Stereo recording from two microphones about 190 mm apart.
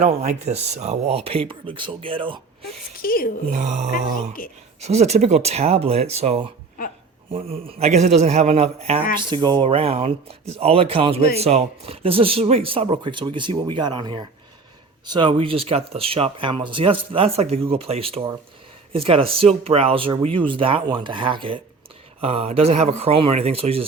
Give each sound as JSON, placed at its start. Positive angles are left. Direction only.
{"t": 0.0, "sound": "speech", "side_deg": -35}
{"t": 3.0, "sound": "speech", "side_deg": 50}
{"t": 3.5, "sound": "speech", "side_deg": -40}